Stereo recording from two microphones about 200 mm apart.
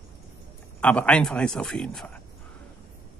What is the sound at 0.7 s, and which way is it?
Speech, 5° left (ahead or behind).